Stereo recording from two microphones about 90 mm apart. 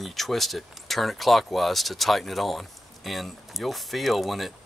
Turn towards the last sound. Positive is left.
turn(degrees=0)  # may be behind; listen again after turning